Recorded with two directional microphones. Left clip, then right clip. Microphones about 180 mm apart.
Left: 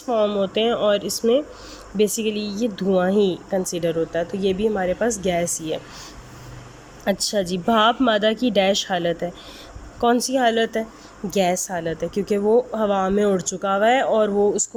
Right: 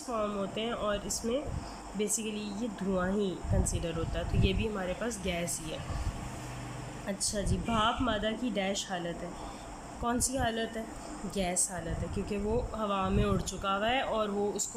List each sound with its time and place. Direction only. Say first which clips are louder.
0.1 s speech: left 14 dB; 45° left (ahead or behind)
7.0 s speech: left 14 dB; 55° left (ahead or behind)